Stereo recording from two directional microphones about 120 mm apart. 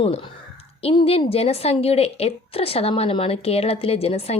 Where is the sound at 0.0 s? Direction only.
50° left (ahead or behind).